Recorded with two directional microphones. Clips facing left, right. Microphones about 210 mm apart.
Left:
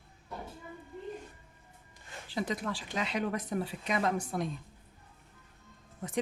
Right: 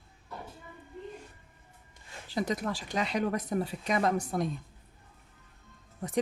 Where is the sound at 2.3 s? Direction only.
40° right (ahead or behind).